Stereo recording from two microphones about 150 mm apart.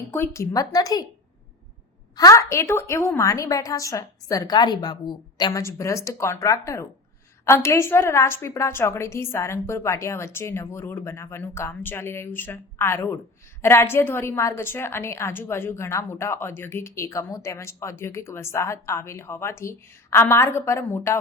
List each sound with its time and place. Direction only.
0.1 s a woman's voice: 20° left (ahead or behind)
2.1 s a woman's voice: 20° left (ahead or behind)